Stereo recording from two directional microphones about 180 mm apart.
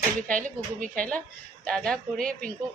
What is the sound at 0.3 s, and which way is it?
Speech, 45° right (ahead or behind).